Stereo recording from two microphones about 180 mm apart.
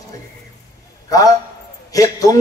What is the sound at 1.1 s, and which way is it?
A man's voice, 20° left (ahead or behind).